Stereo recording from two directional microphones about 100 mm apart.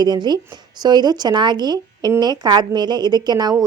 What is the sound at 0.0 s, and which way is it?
A woman's voice, 45° right (ahead or behind).